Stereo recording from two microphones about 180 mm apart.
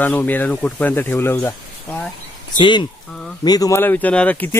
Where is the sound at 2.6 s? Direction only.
25° left (ahead or behind).